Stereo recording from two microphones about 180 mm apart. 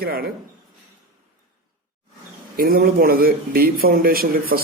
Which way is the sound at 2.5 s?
55° right (ahead or behind).